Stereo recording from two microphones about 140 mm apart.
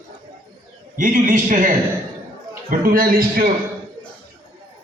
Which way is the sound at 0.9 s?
70° right (ahead or behind).